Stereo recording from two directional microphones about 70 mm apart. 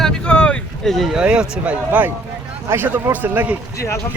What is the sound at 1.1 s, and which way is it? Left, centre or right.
A man's voice, centre.